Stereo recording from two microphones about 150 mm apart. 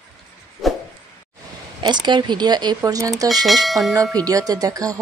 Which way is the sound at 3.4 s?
Centre (ahead or behind).